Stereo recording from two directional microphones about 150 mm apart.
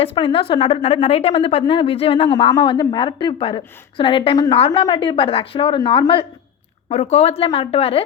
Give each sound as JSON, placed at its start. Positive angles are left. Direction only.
{"t": 0.0, "sound": "a woman's voice", "side_deg": 40}